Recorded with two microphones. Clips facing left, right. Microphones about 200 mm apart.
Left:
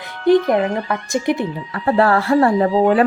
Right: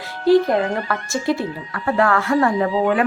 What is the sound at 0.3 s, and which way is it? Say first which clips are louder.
Speech: left 1 dB; 20° left (ahead or behind).